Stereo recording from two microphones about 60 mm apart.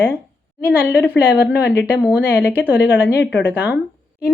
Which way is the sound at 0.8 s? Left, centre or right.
Left.